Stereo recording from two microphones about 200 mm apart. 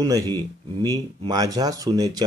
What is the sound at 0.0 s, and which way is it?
Speech, 20° right (ahead or behind).